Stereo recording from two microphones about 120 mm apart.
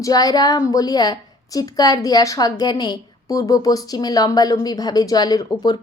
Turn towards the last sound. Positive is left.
turn(degrees=35)  # may be behind; listen again after turning